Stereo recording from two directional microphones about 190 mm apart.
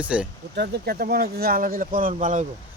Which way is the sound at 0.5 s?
55° right (ahead or behind).